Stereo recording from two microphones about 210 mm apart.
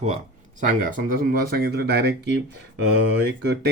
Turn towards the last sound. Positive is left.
turn(degrees=-50)  # may be behind; listen again after turning